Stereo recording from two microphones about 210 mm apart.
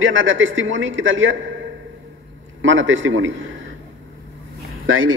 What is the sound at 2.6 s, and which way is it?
Speech, 65° right (ahead or behind).